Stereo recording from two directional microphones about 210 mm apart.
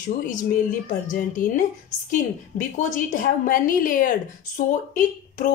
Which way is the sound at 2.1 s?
35° left (ahead or behind).